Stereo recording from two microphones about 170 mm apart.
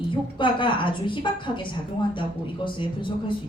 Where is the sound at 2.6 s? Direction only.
30° left (ahead or behind).